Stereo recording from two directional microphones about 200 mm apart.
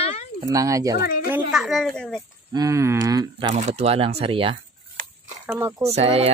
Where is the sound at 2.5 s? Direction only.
15° right (ahead or behind).